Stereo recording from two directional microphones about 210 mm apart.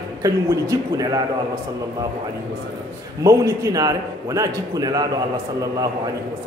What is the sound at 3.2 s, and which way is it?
A man's voice, 15° right (ahead or behind).